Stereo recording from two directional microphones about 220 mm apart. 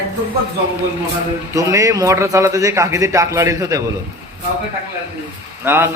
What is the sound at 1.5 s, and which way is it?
A man's voice, 15° right (ahead or behind).